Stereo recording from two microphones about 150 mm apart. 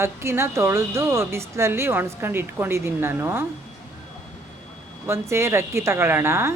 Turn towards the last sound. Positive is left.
turn(degrees=-20)  # may be behind; listen again after turning